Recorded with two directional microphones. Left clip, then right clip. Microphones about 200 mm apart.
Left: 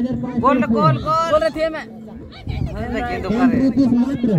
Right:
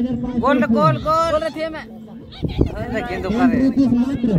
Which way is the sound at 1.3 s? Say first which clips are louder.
Left 4 dB; 55° left (ahead or behind).